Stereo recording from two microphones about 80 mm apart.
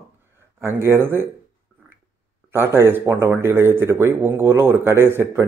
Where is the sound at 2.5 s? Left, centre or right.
Right.